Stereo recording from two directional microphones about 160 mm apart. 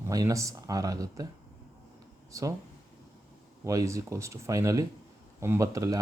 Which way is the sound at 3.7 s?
20° right (ahead or behind).